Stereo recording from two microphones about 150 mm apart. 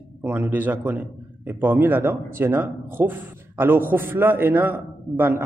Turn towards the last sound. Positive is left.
turn(degrees=-15)  # may be behind; listen again after turning